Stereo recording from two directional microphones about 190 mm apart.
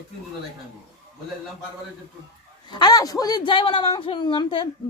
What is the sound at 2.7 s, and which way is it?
A man's voice, 20° left (ahead or behind).